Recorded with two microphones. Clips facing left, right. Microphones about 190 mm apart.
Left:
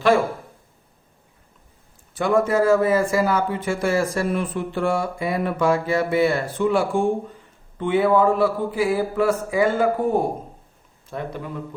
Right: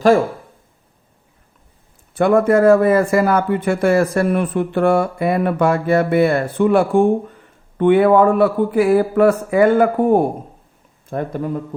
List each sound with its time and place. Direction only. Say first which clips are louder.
2.1 s speech: right 6 dB; 60° right (ahead or behind)
11.1 s a man's voice: right 8 dB; 45° right (ahead or behind)